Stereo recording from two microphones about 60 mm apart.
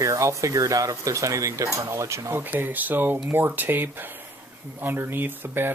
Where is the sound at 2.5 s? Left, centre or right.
Right.